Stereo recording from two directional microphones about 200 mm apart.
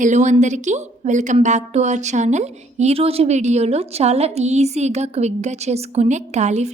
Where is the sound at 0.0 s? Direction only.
35° right (ahead or behind).